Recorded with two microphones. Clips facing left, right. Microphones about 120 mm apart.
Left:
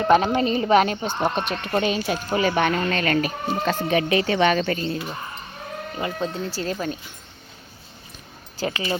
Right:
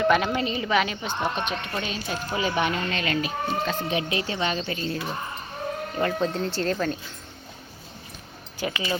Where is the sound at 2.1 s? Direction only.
70° left (ahead or behind).